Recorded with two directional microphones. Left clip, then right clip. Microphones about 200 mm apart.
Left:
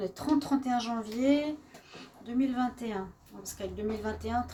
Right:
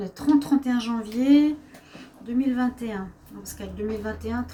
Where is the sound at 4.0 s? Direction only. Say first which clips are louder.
Right 2 dB; 45° left (ahead or behind).